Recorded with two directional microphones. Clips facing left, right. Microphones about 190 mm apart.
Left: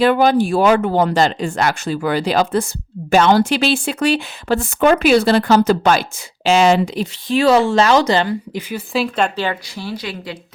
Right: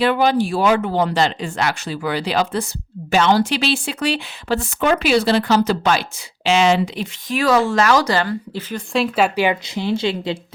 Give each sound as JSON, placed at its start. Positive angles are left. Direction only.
{"t": 0.0, "sound": "speech", "side_deg": 45}
{"t": 8.9, "sound": "a woman's voice", "side_deg": 0}